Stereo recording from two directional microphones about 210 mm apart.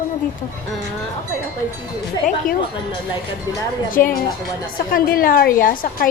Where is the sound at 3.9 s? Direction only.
40° left (ahead or behind).